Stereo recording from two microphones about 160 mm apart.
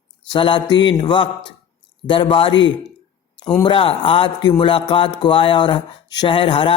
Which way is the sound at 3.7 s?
35° left (ahead or behind).